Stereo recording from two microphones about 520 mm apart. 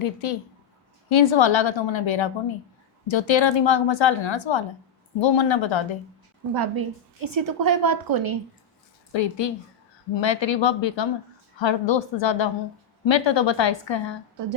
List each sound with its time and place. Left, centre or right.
0.0 s a woman's voice: left
6.5 s a woman's voice: right
9.1 s speech: left